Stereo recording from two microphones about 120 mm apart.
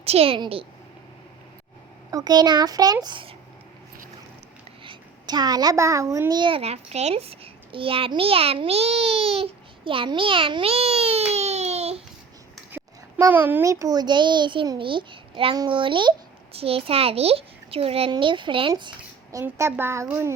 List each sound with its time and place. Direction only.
0.0 s a woman's voice: 55° right (ahead or behind)
2.0 s a child's voice: 35° right (ahead or behind)
4.8 s a child's voice: 40° right (ahead or behind)
6.6 s a child's voice: 60° right (ahead or behind)
13.3 s a child's voice: 15° right (ahead or behind)
13.7 s a child's voice: 30° right (ahead or behind); by 18.1 s 55° right (ahead or behind)
18.1 s a child's voice: 40° right (ahead or behind)
19.5 s speech: 20° right (ahead or behind)